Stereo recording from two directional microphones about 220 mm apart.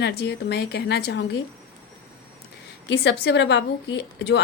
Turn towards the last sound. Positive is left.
turn(degrees=50)  # may be behind; listen again after turning